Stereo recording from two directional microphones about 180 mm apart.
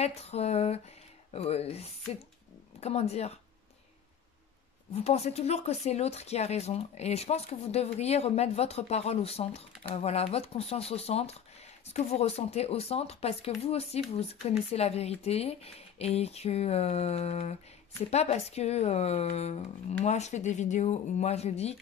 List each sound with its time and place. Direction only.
0.0 s speech: 35° left (ahead or behind)
4.9 s speech: 35° left (ahead or behind)